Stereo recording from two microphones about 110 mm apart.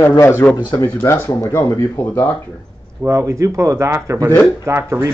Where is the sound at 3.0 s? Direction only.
25° right (ahead or behind).